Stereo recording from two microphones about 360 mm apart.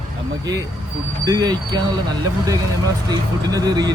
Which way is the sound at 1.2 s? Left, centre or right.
Centre.